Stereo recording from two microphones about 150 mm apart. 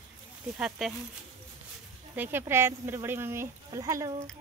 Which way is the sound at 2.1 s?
15° right (ahead or behind).